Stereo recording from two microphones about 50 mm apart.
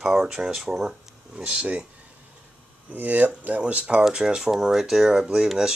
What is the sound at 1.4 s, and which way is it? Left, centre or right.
Speech, right.